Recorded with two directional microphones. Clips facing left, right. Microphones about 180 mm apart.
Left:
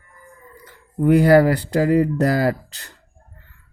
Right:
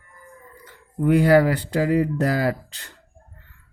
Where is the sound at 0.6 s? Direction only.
40° left (ahead or behind).